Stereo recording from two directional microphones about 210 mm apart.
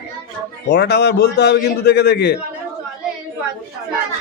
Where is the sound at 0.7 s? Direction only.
55° left (ahead or behind).